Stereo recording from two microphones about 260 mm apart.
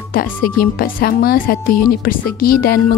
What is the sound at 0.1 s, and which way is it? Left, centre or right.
Speech, left.